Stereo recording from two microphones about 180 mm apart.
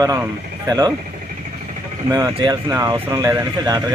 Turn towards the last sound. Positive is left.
turn(degrees=-20)  # may be behind; listen again after turning